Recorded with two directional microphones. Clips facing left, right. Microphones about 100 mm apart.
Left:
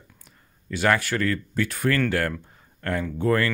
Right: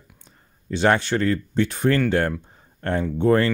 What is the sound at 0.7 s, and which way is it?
Speech, 25° right (ahead or behind).